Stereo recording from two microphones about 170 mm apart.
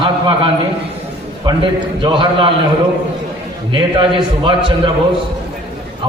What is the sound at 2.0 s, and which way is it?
Speech, 30° right (ahead or behind).